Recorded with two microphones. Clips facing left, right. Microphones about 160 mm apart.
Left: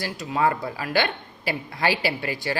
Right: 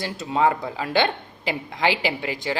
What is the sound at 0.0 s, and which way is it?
Speech, 25° right (ahead or behind).